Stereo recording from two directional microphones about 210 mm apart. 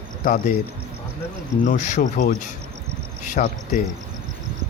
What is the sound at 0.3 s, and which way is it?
Speech, 45° left (ahead or behind).